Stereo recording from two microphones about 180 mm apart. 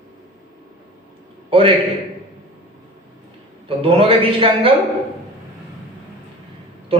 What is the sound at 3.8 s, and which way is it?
Speech, 30° right (ahead or behind).